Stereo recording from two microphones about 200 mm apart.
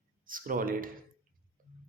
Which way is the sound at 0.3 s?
45° right (ahead or behind).